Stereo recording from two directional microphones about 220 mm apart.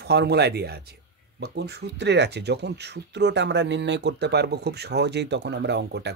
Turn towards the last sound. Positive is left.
turn(degrees=-50)  # may be behind; listen again after turning